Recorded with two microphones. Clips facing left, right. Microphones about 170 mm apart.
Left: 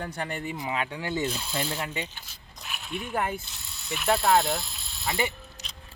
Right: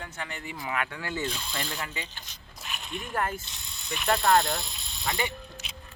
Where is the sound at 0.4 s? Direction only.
20° left (ahead or behind).